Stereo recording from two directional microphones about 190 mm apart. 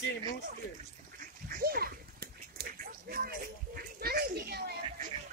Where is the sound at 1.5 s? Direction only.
50° right (ahead or behind).